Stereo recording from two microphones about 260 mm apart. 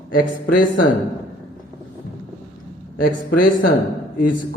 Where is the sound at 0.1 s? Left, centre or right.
Left.